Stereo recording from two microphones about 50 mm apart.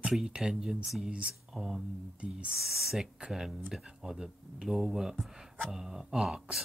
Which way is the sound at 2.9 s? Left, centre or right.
Centre.